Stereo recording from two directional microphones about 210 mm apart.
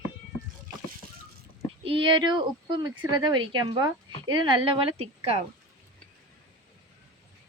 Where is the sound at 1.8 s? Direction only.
25° right (ahead or behind).